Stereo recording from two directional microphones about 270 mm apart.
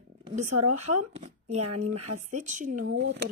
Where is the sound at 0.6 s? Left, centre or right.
Right.